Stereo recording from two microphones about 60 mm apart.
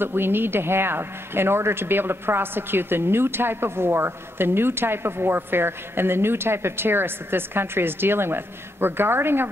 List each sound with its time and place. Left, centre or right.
0.0 s speech: right